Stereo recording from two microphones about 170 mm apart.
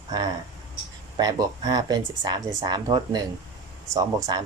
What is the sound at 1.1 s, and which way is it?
Speech, 25° right (ahead or behind).